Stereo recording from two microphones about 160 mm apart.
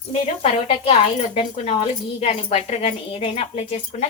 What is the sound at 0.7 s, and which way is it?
A woman's voice, 40° left (ahead or behind).